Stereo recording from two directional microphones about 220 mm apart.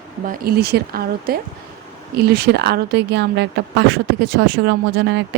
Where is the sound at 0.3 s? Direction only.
45° right (ahead or behind).